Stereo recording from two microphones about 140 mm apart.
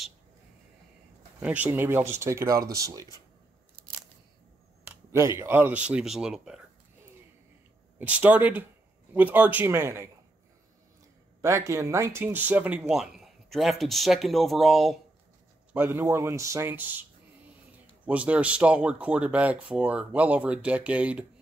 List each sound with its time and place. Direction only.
1.4 s speech: 10° right (ahead or behind)
4.8 s speech: 20° right (ahead or behind); by 6.6 s 5° right (ahead or behind)
8.0 s speech: 10° right (ahead or behind)
11.4 s speech: 20° right (ahead or behind); by 15.0 s centre (ahead or behind)
15.7 s speech: 15° right (ahead or behind)
18.0 s speech: 10° right (ahead or behind)